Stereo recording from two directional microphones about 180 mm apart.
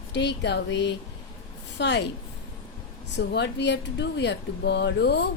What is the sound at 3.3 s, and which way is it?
Speech, 70° left (ahead or behind).